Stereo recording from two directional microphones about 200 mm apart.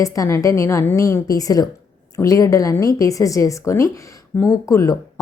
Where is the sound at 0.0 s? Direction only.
15° left (ahead or behind).